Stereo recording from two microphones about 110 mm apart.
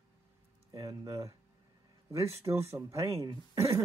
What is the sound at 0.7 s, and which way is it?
Speech, 35° right (ahead or behind).